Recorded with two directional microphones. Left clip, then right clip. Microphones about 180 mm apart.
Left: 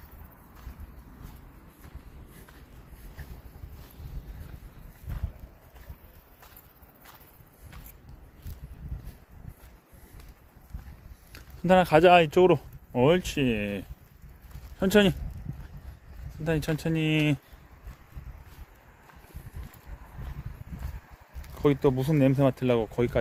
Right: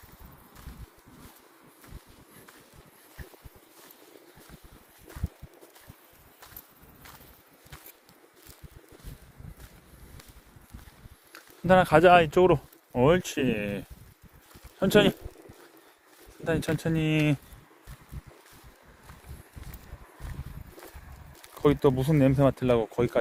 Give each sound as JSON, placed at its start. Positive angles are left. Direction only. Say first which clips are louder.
{"t": 11.3, "sound": "speech", "louder": "right 1 dB", "side_deg": 20}
{"t": 16.4, "sound": "speech", "louder": "right 1 dB", "side_deg": 15}
{"t": 21.5, "sound": "speech", "louder": "right 1 dB", "side_deg": 0}